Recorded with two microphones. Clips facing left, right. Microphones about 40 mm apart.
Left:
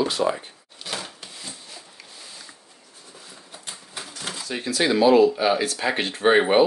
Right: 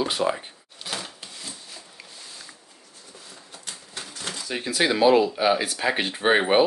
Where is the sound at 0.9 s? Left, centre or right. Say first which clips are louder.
Left 1 dB; centre.